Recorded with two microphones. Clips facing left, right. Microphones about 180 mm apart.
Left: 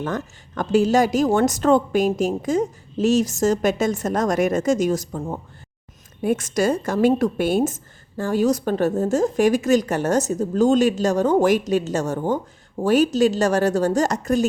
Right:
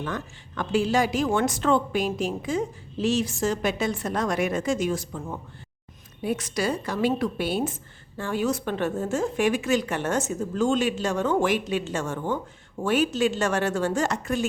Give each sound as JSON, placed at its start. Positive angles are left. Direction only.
{"t": 0.0, "sound": "a woman's voice", "side_deg": 45}